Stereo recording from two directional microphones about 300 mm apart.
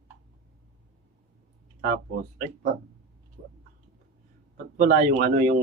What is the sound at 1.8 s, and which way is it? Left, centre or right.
Speech, right.